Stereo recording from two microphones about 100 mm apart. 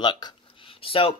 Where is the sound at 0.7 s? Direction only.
70° left (ahead or behind).